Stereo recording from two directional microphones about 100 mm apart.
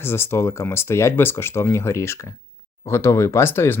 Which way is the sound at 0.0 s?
25° left (ahead or behind).